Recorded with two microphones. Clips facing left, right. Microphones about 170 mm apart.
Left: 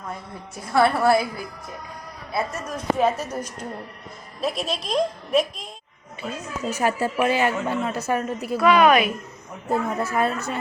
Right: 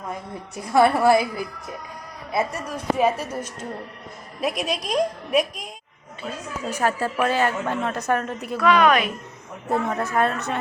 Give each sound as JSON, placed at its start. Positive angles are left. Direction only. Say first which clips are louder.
{"t": 0.1, "sound": "a woman's voice", "louder": "right 3 dB", "side_deg": -15}
{"t": 2.3, "sound": "a woman's voice", "louder": "right 2 dB", "side_deg": -15}
{"t": 4.4, "sound": "a woman's voice", "louder": "right 1 dB", "side_deg": -15}
{"t": 6.2, "sound": "a woman's voice", "louder": "left 1 dB", "side_deg": 5}